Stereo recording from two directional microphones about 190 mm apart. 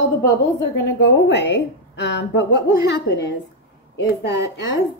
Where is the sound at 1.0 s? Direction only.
65° left (ahead or behind).